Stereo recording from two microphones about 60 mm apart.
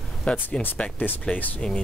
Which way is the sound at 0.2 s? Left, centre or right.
Centre.